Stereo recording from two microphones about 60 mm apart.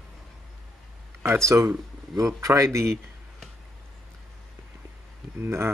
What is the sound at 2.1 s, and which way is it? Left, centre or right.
Speech, right.